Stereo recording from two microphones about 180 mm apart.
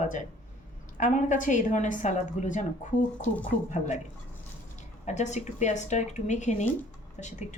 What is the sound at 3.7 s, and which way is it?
A woman's voice, 40° left (ahead or behind).